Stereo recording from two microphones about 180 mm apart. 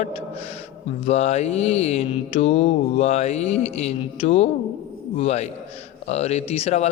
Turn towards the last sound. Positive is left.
turn(degrees=35)  # may be behind; listen again after turning